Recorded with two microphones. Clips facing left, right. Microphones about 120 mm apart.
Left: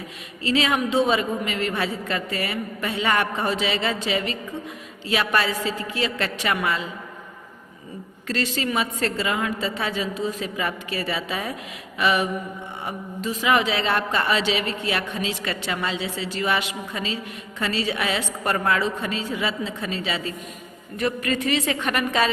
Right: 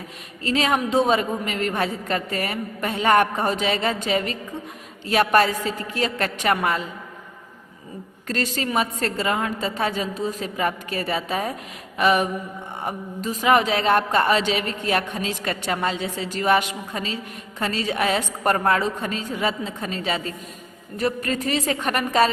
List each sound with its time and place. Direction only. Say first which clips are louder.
0.4 s a woman's voice: even; 45° right (ahead or behind)
8.3 s a woman's voice: even; 45° right (ahead or behind)